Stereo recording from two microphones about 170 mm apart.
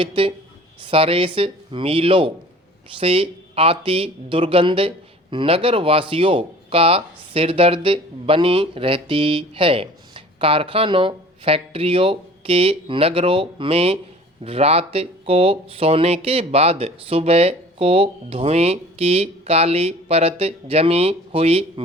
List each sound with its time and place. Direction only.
0.0 s speech: 30° right (ahead or behind)